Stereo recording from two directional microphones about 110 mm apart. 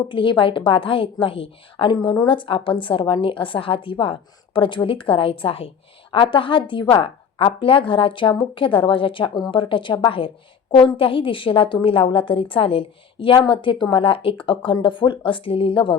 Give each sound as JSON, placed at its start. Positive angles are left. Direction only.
{"t": 0.1, "sound": "a woman's voice", "side_deg": 50}
{"t": 2.0, "sound": "a woman's voice", "side_deg": 40}